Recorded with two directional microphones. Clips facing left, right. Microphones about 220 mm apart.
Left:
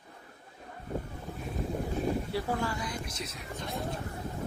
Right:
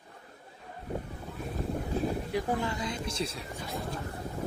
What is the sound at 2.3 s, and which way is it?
Speech, 20° right (ahead or behind).